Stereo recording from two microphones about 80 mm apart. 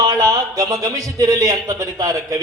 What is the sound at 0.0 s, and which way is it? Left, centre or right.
A man's voice, right.